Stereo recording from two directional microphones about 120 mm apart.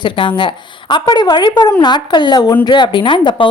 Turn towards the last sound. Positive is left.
turn(degrees=45)  # may be behind; listen again after turning